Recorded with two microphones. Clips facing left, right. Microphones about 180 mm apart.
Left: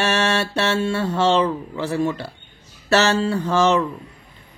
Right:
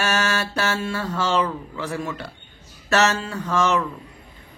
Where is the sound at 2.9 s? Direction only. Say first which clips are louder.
Left 3 dB; 30° left (ahead or behind).